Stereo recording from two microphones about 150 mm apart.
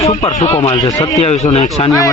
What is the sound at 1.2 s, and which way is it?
Speech, 45° left (ahead or behind).